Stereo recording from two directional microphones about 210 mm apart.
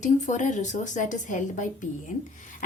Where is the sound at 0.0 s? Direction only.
35° left (ahead or behind).